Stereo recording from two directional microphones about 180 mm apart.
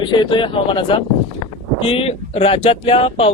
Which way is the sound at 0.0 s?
25° left (ahead or behind).